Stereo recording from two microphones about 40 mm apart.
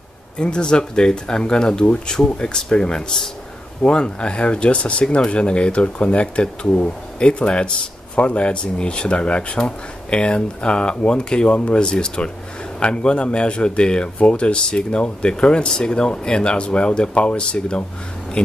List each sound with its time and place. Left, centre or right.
0.4 s speech: left